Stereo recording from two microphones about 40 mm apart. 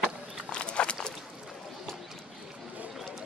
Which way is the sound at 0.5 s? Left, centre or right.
Left.